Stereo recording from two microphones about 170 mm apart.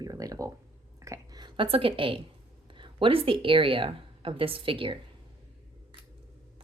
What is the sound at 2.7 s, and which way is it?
A woman's voice, 30° right (ahead or behind).